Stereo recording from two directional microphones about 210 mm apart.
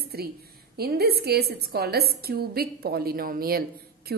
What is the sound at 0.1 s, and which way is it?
A woman's voice, 50° right (ahead or behind).